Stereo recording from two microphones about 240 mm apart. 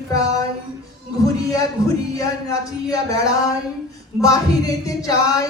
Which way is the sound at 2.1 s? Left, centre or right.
Centre.